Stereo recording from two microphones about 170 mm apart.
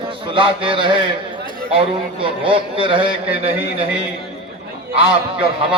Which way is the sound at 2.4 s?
30° right (ahead or behind).